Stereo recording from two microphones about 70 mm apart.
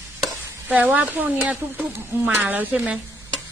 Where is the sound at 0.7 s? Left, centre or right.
Right.